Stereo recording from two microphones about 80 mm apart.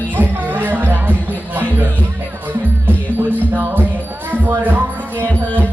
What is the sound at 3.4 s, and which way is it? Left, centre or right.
Music, right.